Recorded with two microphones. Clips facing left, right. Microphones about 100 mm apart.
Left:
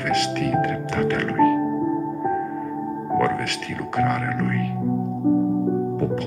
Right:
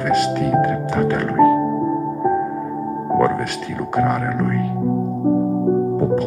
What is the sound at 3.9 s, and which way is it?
Speech, 35° right (ahead or behind).